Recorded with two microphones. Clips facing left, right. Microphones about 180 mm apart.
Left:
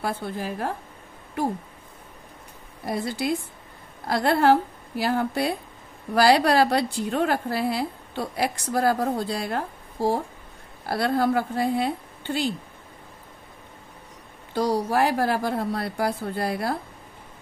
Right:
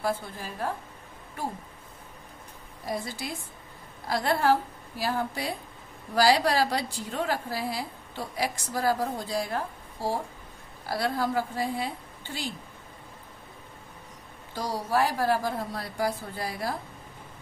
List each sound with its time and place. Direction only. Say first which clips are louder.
0.0 s a woman's voice: left 2 dB; 65° left (ahead or behind)
2.8 s a woman's voice: left 6 dB; 65° left (ahead or behind)
10.9 s a woman's voice: left 6 dB; 60° left (ahead or behind)
14.5 s a woman's voice: left 6 dB; 60° left (ahead or behind)